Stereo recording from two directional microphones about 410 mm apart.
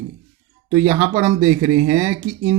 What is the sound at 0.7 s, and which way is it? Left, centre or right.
A man's voice, centre.